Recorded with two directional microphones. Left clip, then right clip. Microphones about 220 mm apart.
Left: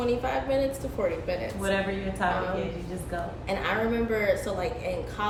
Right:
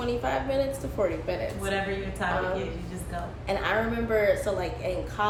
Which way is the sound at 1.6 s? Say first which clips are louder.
Left 4 dB; 20° left (ahead or behind).